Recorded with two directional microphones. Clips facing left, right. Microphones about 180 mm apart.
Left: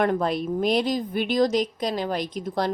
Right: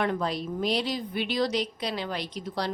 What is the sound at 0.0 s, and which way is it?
Speech, 50° left (ahead or behind).